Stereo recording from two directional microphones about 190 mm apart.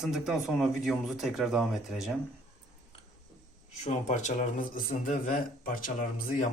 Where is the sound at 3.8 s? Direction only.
40° left (ahead or behind).